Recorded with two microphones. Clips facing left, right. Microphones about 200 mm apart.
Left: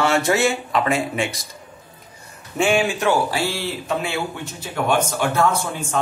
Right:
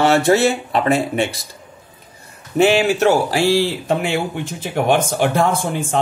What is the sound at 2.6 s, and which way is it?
Speech, 40° right (ahead or behind).